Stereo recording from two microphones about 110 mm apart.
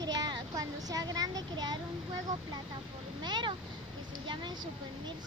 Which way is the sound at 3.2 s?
45° right (ahead or behind).